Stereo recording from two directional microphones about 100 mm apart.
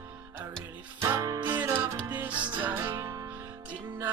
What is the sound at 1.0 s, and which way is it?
Music, 35° right (ahead or behind).